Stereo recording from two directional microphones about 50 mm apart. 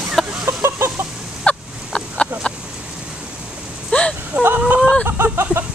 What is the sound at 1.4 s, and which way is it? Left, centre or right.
Fowl, left.